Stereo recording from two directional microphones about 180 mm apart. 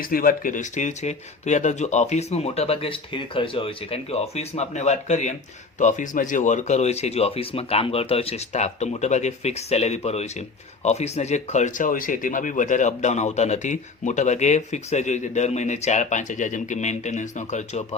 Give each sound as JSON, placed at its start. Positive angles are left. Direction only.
{"t": 0.0, "sound": "speech", "side_deg": 50}